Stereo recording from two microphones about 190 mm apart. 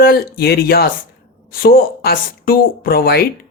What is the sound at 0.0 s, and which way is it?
Speech, 55° left (ahead or behind).